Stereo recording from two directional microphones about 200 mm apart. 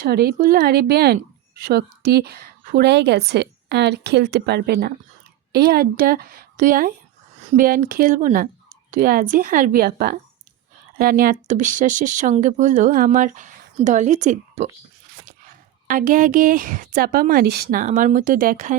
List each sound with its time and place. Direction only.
0.0 s a woman's voice: 50° right (ahead or behind)
15.9 s a woman's voice: 40° right (ahead or behind)